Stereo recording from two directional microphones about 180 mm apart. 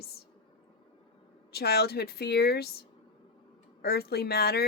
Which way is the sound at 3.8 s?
60° left (ahead or behind).